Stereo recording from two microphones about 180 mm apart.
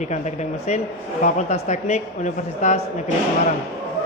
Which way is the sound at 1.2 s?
40° left (ahead or behind).